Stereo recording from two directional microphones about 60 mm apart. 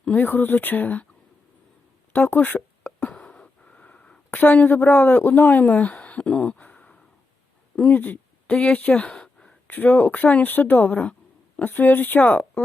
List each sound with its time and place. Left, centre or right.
0.0 s speech: left
2.1 s speech: left
3.0 s a sound: centre
4.4 s speech: left
6.2 s a sound: left
8.5 s speech: left
9.6 s speech: left